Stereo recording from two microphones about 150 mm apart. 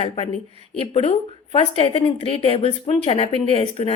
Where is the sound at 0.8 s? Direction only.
40° left (ahead or behind).